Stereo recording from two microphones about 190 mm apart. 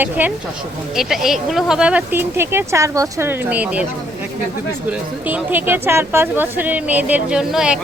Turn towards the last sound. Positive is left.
turn(degrees=-5)  # may be behind; listen again after turning